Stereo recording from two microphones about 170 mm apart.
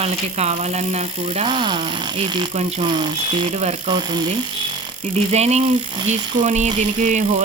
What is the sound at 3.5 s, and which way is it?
Speech, 40° right (ahead or behind).